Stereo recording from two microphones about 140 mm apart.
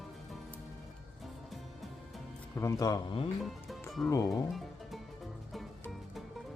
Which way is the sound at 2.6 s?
25° left (ahead or behind).